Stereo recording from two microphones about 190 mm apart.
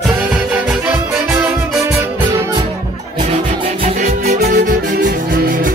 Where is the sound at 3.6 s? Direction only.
30° right (ahead or behind); by 5.7 s 45° right (ahead or behind).